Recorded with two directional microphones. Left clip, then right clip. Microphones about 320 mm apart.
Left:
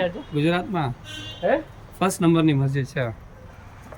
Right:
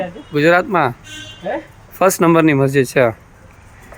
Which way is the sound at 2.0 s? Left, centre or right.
Right.